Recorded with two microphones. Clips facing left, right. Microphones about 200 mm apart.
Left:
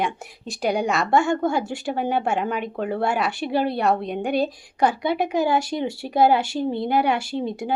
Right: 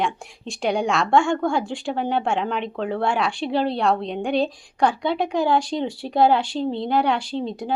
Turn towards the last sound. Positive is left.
turn(degrees=10)  # may be behind; listen again after turning